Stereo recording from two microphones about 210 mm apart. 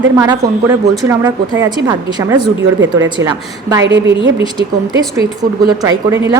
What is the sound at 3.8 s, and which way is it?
Speech, 60° right (ahead or behind).